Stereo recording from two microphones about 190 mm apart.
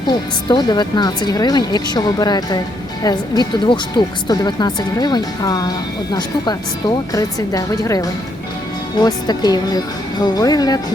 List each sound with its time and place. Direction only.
0.1 s speech: 20° left (ahead or behind)